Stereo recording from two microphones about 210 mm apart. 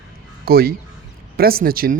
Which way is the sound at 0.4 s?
45° right (ahead or behind).